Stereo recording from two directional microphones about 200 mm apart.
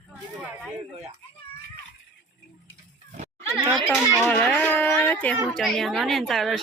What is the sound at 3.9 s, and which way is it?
Speech, 10° left (ahead or behind).